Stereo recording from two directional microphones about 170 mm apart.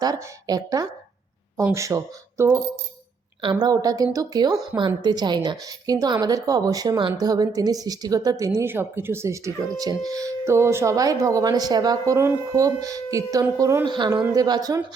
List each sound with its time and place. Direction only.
0.0 s speech: 25° right (ahead or behind)
5.0 s speech: 25° right (ahead or behind)